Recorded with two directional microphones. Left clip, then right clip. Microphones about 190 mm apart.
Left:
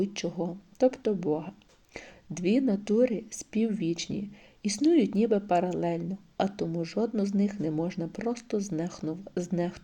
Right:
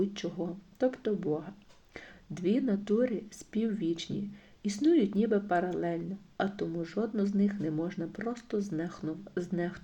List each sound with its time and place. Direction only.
0.0 s speech: 30° left (ahead or behind)